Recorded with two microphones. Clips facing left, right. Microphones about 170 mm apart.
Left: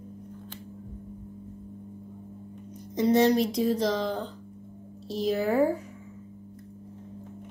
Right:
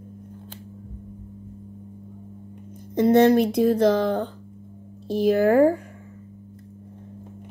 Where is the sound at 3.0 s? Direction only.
55° right (ahead or behind).